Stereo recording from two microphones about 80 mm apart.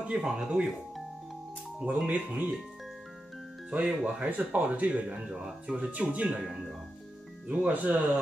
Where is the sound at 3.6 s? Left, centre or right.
Centre.